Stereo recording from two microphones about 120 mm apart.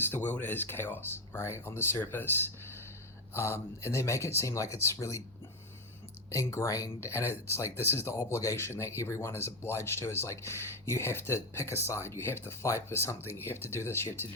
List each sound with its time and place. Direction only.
0.0 s speech: 15° left (ahead or behind)
6.3 s speech: 25° left (ahead or behind)